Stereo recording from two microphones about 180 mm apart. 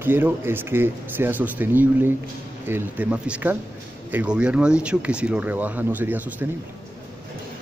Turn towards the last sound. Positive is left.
turn(degrees=-10)  # may be behind; listen again after turning